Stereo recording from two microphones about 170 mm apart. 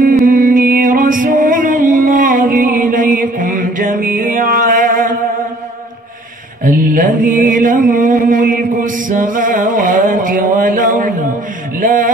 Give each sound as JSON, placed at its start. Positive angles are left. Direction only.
{"t": 0.0, "sound": "music", "side_deg": -55}
{"t": 6.6, "sound": "mantra", "side_deg": -55}
{"t": 11.8, "sound": "music", "side_deg": -50}